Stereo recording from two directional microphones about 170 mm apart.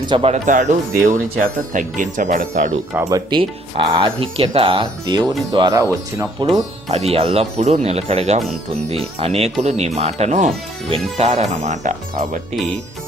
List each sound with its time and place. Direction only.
0.0 s speech: 30° right (ahead or behind)
0.4 s speech: 45° right (ahead or behind)
3.1 s speech: 25° right (ahead or behind)
6.9 s speech: 35° right (ahead or behind)